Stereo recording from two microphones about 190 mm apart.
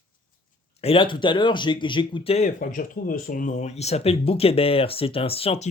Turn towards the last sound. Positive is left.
turn(degrees=30)  # may be behind; listen again after turning